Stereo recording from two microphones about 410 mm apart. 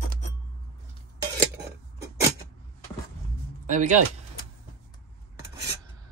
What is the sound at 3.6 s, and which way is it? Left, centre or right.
Music, centre.